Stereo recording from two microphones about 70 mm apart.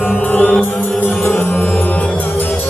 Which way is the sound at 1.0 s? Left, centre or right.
Left.